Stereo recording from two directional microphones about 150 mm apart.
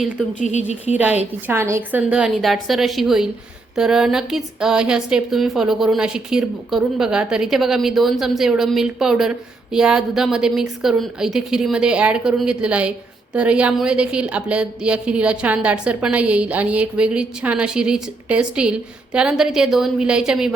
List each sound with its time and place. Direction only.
0.0 s a woman's voice: 5° right (ahead or behind)
0.4 s a woman's voice: 50° left (ahead or behind)
0.9 s a woman's voice: 10° right (ahead or behind)